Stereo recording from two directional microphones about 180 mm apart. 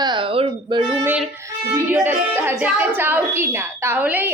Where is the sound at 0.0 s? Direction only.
25° right (ahead or behind).